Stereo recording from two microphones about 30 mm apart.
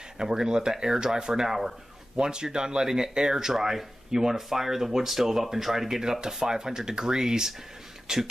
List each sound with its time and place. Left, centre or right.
0.2 s speech: right